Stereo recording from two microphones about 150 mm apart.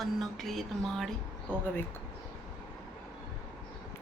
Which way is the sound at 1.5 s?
10° left (ahead or behind).